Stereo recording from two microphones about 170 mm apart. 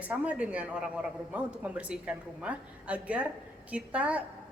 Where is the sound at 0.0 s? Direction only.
5° right (ahead or behind).